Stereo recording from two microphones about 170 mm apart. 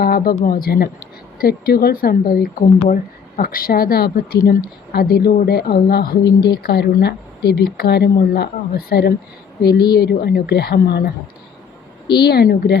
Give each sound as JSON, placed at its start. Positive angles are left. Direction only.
{"t": 0.0, "sound": "a sound", "side_deg": 60}
{"t": 0.4, "sound": "speech", "side_deg": 60}
{"t": 12.2, "sound": "speech", "side_deg": 70}